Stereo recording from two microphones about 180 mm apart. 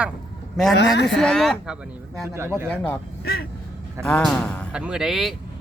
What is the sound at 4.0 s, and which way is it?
Speech, 5° left (ahead or behind).